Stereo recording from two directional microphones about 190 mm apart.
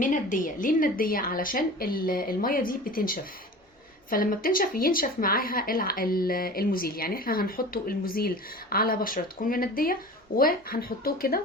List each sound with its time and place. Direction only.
0.0 s a woman's voice: 45° left (ahead or behind)